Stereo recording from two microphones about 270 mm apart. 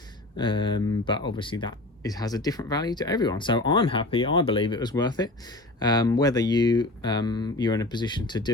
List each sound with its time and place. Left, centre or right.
0.3 s speech: centre